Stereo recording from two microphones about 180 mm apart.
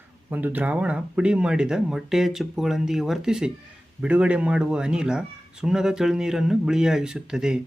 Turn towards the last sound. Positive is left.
turn(degrees=-5)  # may be behind; listen again after turning